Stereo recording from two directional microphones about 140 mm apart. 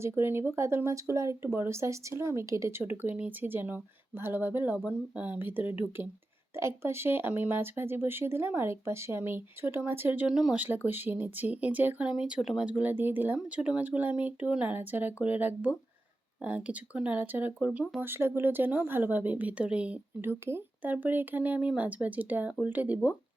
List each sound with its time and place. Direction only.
0.0 s speech: 15° right (ahead or behind)